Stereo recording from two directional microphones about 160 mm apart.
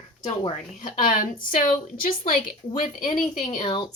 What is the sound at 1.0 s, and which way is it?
A woman's voice, 60° left (ahead or behind).